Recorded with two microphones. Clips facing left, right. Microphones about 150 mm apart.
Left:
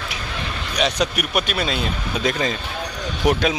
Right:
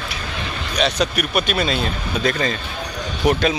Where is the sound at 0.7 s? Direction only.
10° left (ahead or behind).